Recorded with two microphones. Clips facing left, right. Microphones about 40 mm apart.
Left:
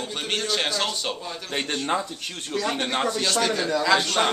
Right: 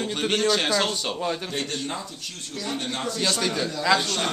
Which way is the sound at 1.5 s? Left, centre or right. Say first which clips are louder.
Left 2 dB; left.